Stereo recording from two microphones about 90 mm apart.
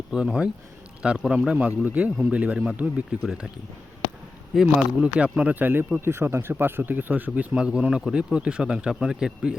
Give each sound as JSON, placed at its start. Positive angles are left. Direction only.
{"t": 0.1, "sound": "speech", "side_deg": -5}
{"t": 4.6, "sound": "speech", "side_deg": -10}